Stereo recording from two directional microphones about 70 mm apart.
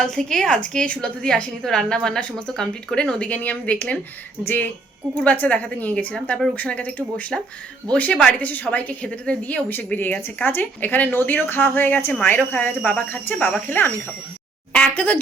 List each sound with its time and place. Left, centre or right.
0.0 s a woman's voice: centre; by 15.2 s left